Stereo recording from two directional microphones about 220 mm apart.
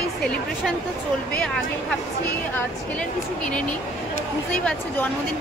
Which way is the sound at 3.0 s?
5° left (ahead or behind).